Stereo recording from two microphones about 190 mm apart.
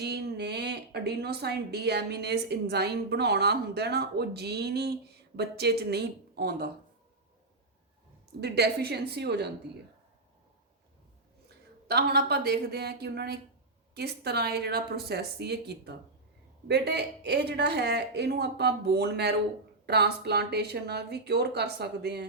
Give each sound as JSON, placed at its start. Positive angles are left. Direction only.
{"t": 0.0, "sound": "speech", "side_deg": -60}
{"t": 8.4, "sound": "speech", "side_deg": -60}
{"t": 11.4, "sound": "speech", "side_deg": -55}